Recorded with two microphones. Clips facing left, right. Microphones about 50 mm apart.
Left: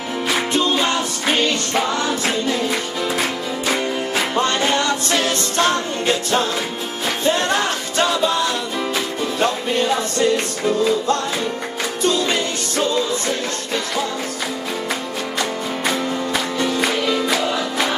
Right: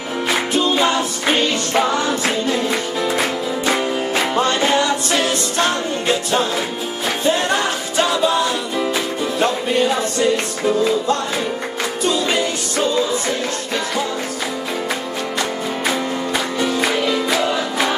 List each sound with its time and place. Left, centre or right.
0.5 s music: centre
16.5 s music: centre